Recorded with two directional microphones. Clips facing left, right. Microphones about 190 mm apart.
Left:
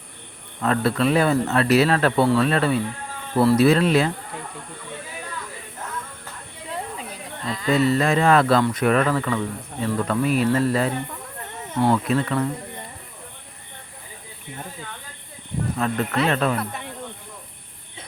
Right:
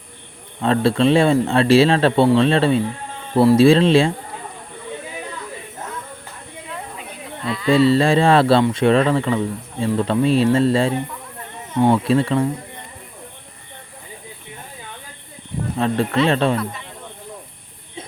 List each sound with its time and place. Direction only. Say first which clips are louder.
0.6 s speech: right 4 dB; 25° right (ahead or behind)
7.4 s speech: right 4 dB; 40° left (ahead or behind)
7.7 s speech: right 5 dB; 30° right (ahead or behind)
15.8 s speech: right 5 dB; 30° right (ahead or behind)